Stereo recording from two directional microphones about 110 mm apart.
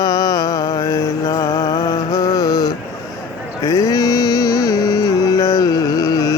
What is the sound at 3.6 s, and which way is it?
Music, 30° left (ahead or behind).